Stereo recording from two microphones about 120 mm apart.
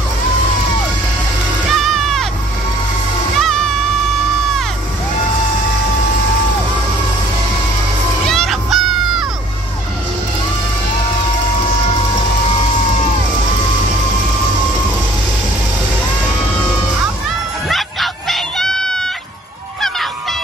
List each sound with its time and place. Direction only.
1.7 s music: centre (ahead or behind)
3.3 s music: 5° left (ahead or behind)
8.3 s music: centre (ahead or behind)
17.6 s a sound: centre (ahead or behind)
19.8 s honk: centre (ahead or behind)